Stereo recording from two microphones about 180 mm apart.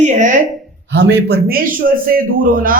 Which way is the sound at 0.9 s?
70° right (ahead or behind).